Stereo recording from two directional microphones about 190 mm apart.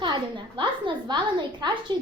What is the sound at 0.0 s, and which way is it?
A woman's voice, 25° right (ahead or behind).